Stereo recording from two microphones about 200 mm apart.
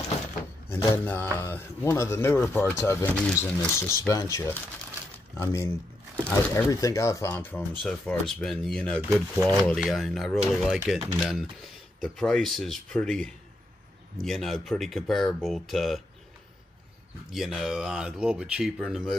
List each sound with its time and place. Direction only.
0.7 s speech: 10° left (ahead or behind)
17.3 s speech: centre (ahead or behind)